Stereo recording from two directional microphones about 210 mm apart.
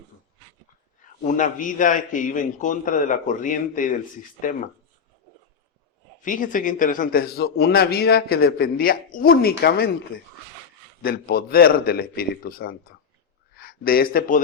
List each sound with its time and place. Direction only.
1.2 s a man's voice: 35° left (ahead or behind)
6.2 s a man's voice: 40° left (ahead or behind)